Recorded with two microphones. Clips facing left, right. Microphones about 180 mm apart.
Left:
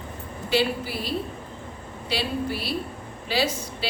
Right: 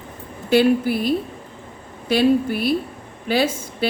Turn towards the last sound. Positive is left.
turn(degrees=-50)  # may be behind; listen again after turning